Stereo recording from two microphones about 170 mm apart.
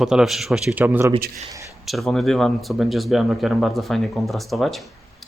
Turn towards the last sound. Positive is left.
turn(degrees=0)  # may be behind; listen again after turning